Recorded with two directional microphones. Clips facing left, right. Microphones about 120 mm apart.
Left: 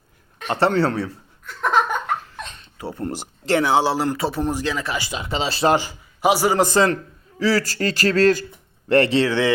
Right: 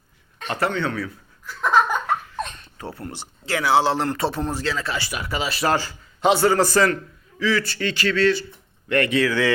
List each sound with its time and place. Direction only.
0.4 s speech: 25° left (ahead or behind)
0.7 s speech: 40° left (ahead or behind)
1.5 s laughter: centre (ahead or behind)
2.7 s speech: 15° left (ahead or behind)
3.0 s speech: 30° left (ahead or behind)
3.9 s speech: 5° left (ahead or behind)
4.4 s speech: 15° left (ahead or behind)
5.7 s a man's voice: 15° left (ahead or behind)
6.9 s speech: 35° left (ahead or behind)
8.9 s speech: 30° left (ahead or behind)